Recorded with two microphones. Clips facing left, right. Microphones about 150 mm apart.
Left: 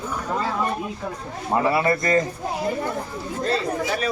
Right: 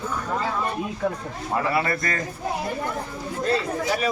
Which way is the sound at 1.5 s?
25° left (ahead or behind).